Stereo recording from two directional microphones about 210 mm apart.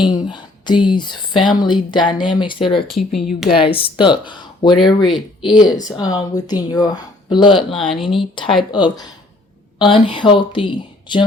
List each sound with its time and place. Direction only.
0.0 s speech: 20° left (ahead or behind)
2.8 s speech: centre (ahead or behind)
3.6 s speech: 25° left (ahead or behind)
7.8 s speech: centre (ahead or behind)
8.7 s speech: 20° left (ahead or behind)